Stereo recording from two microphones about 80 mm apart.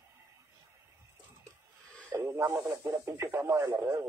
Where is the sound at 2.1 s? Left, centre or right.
Right.